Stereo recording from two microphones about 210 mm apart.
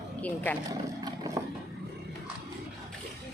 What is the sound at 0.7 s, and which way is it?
Vehicle, 15° right (ahead or behind).